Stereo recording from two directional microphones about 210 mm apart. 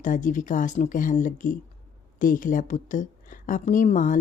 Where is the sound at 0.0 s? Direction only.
40° left (ahead or behind).